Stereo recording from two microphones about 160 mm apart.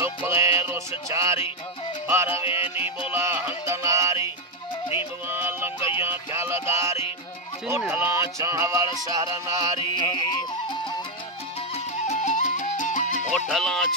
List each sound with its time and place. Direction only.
0.0 s music: 15° right (ahead or behind)
2.3 s music: 35° left (ahead or behind)
3.1 s music: 15° right (ahead or behind)
5.3 s music: 15° right (ahead or behind)
5.8 s music: 30° left (ahead or behind)
6.0 s music: 15° right (ahead or behind)
9.8 s music: 25° left (ahead or behind)
11.7 s music: 50° left (ahead or behind)
13.5 s music: centre (ahead or behind)